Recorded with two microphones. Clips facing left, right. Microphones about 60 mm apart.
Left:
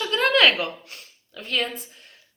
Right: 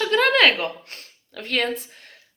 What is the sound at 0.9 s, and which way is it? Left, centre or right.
Speech, right.